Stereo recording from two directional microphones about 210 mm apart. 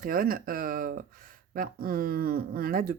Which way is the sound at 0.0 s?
45° right (ahead or behind).